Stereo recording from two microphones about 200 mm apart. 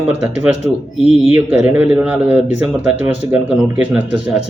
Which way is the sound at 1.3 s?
10° right (ahead or behind).